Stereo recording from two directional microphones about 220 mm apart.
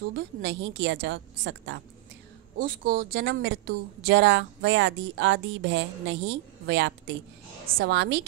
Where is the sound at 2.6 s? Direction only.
40° right (ahead or behind).